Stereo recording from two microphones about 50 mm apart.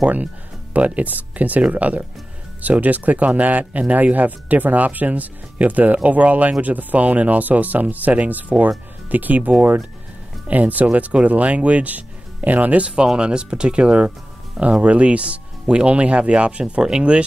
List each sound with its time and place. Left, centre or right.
0.7 s speech: right